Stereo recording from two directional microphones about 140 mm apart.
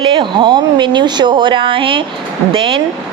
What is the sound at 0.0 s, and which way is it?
A woman's voice, 35° right (ahead or behind).